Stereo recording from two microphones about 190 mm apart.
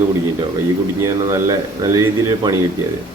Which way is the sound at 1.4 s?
20° right (ahead or behind).